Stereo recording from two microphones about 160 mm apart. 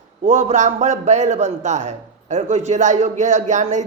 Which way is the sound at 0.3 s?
45° right (ahead or behind).